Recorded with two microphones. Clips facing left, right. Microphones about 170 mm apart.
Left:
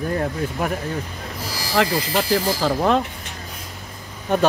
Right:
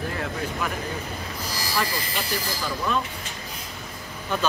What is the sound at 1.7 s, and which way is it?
Speech, 90° left.